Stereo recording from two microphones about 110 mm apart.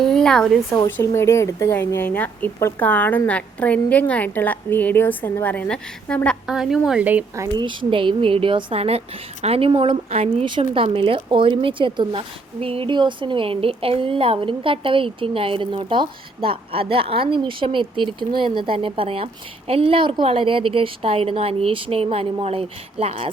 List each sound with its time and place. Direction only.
0.0 s speech: 5° left (ahead or behind)
1.0 s a woman's voice: 25° left (ahead or behind)
2.6 s a woman's voice: 25° left (ahead or behind)
2.8 s a woman's voice: 15° left (ahead or behind)
6.5 s a woman's voice: 5° right (ahead or behind)
7.5 s a woman's voice: 45° right (ahead or behind); by 10.4 s 65° right (ahead or behind)
10.4 s speech: 50° right (ahead or behind)